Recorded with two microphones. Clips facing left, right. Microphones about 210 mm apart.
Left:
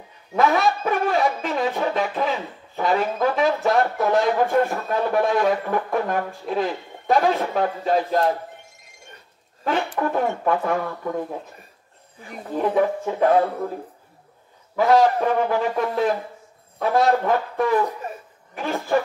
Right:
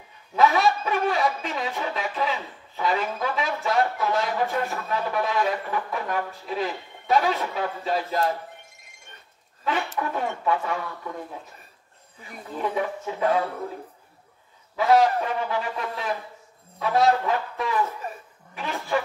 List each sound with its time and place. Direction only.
0.3 s a man's voice: 50° left (ahead or behind)
9.7 s speech: 50° left (ahead or behind)
12.5 s speech: 45° left (ahead or behind)
14.8 s speech: 45° left (ahead or behind)